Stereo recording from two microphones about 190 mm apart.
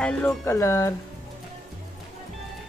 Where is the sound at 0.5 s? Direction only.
15° left (ahead or behind).